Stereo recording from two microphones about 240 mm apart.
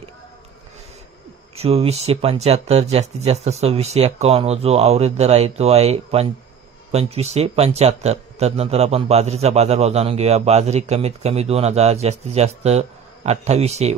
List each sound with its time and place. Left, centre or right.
1.5 s a man's voice: right